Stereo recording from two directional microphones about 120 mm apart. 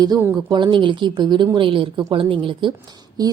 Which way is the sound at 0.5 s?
40° right (ahead or behind).